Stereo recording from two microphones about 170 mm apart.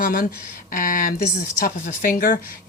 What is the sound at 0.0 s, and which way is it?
Speech, 55° left (ahead or behind).